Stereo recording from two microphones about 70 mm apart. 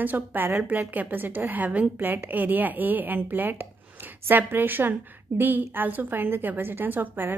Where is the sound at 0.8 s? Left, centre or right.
Right.